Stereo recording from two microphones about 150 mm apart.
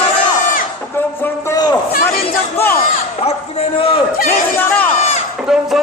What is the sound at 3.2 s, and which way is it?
Speech, 40° left (ahead or behind).